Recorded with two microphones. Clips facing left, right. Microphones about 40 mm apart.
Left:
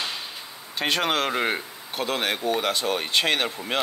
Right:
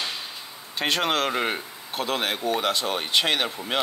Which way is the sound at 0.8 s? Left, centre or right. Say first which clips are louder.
Even; centre.